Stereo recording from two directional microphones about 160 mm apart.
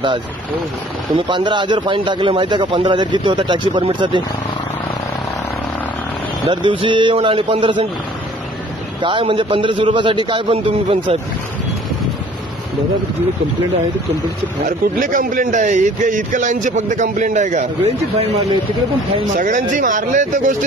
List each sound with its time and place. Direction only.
1.1 s speech: 30° right (ahead or behind)
6.5 s a man's voice: 30° right (ahead or behind)
9.0 s a man's voice: 30° right (ahead or behind)
15.0 s a man's voice: 55° right (ahead or behind)
19.3 s a man's voice: 55° right (ahead or behind)